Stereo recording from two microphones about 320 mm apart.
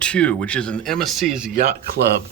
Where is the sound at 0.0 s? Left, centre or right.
Centre.